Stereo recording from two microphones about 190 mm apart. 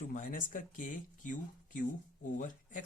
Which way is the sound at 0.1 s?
45° left (ahead or behind).